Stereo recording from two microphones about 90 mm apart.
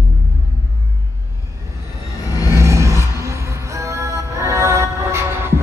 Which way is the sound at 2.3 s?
45° left (ahead or behind).